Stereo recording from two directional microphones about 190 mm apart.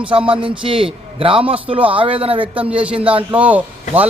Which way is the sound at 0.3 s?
30° right (ahead or behind).